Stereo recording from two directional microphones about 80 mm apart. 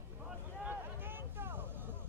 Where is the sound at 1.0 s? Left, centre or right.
Right.